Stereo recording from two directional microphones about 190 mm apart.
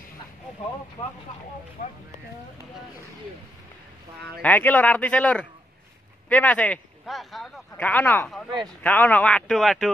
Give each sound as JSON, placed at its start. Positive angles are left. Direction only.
{"t": 4.2, "sound": "a man's voice", "side_deg": 10}
{"t": 8.5, "sound": "speech", "side_deg": -20}
{"t": 8.8, "sound": "a man's voice", "side_deg": 10}